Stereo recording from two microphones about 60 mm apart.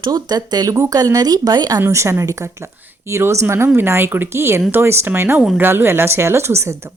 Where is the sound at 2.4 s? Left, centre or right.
Right.